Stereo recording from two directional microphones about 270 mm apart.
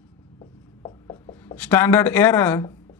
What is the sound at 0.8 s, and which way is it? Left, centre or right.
Rub, centre.